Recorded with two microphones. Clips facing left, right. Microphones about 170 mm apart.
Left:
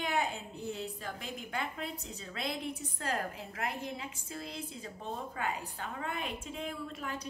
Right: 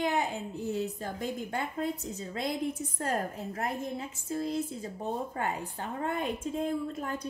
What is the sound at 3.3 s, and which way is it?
Speech, 40° right (ahead or behind).